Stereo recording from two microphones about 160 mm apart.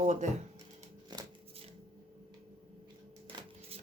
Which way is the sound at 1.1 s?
25° right (ahead or behind).